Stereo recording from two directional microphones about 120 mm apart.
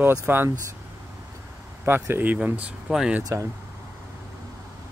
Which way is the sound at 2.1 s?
15° right (ahead or behind).